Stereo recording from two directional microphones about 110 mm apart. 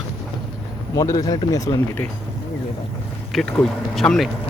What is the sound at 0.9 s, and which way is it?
Speech, 30° left (ahead or behind).